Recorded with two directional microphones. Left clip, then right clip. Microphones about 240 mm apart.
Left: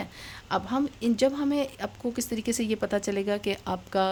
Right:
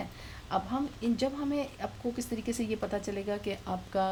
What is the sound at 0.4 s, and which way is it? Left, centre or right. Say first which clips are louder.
A woman's voice: left 4 dB; left.